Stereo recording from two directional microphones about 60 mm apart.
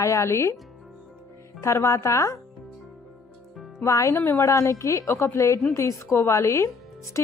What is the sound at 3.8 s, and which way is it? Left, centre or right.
Speech, left.